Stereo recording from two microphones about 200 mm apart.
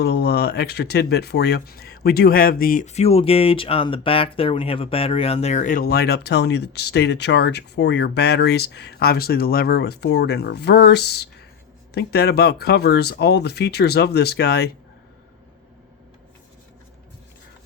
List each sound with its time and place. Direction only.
0.0 s speech: 55° left (ahead or behind)